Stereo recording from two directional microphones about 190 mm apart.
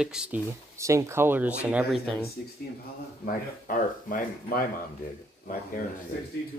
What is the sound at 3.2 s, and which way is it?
Speech, 45° left (ahead or behind).